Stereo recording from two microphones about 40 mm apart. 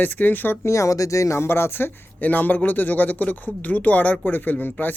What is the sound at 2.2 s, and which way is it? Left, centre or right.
Speech, left.